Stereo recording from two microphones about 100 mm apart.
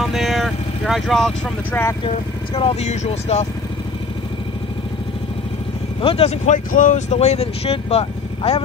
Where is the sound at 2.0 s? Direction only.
75° left (ahead or behind); by 3.4 s 90° left.